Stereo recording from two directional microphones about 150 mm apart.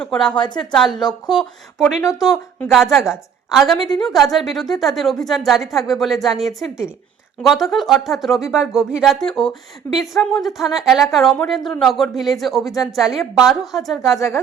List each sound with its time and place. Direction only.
0.0 s a woman's voice: 5° left (ahead or behind)
0.3 s speech: 30° left (ahead or behind)
0.6 s a woman's voice: 5° left (ahead or behind)
2.0 s speech: 20° left (ahead or behind)
2.2 s a woman's voice: 5° left (ahead or behind)
14.2 s speech: 20° left (ahead or behind)